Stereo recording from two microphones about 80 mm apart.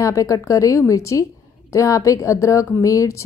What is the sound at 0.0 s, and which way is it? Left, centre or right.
A woman's voice, left.